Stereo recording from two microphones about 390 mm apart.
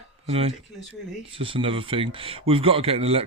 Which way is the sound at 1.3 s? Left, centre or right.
Centre.